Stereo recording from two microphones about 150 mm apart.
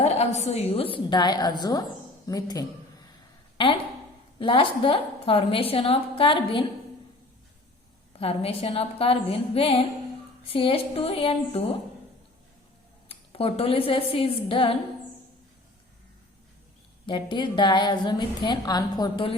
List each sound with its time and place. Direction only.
0.0 s a woman's voice: 45° left (ahead or behind); by 2.6 s 25° left (ahead or behind)
3.6 s a woman's voice: 35° left (ahead or behind)
8.2 s a woman's voice: 40° left (ahead or behind)
13.1 s a woman's voice: 40° left (ahead or behind)
17.1 s a woman's voice: 30° left (ahead or behind)